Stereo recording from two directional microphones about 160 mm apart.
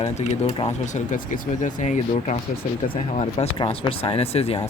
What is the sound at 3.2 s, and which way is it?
Speech, 40° left (ahead or behind).